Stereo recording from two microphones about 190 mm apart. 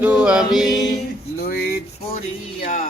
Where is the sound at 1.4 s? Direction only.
55° left (ahead or behind).